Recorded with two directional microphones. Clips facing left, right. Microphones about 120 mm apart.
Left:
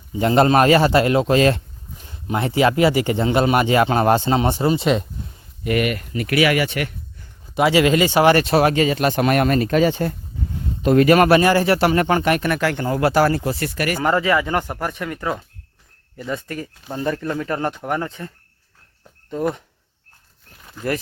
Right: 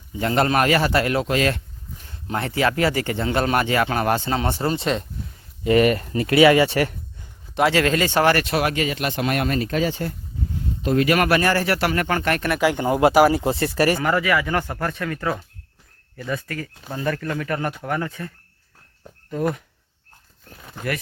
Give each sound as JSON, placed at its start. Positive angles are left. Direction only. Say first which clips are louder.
{"t": 0.1, "sound": "speech", "louder": "left 5 dB", "side_deg": 20}
{"t": 2.0, "sound": "speech", "louder": "left 4 dB", "side_deg": 15}
{"t": 5.6, "sound": "speech", "louder": "right 4 dB", "side_deg": -30}
{"t": 7.5, "sound": "speech", "louder": "left 3 dB", "side_deg": 5}
{"t": 8.3, "sound": "speech", "louder": "left 5 dB", "side_deg": 30}
{"t": 9.2, "sound": "speech", "louder": "left 4 dB", "side_deg": 55}
{"t": 11.0, "sound": "speech", "louder": "left 6 dB", "side_deg": 35}
{"t": 12.5, "sound": "speech", "louder": "right 2 dB", "side_deg": -15}
{"t": 13.5, "sound": "speech", "louder": "right 3 dB", "side_deg": -30}
{"t": 14.0, "sound": "speech", "louder": "left 2 dB", "side_deg": 25}
{"t": 19.3, "sound": "speech", "louder": "left 1 dB", "side_deg": 20}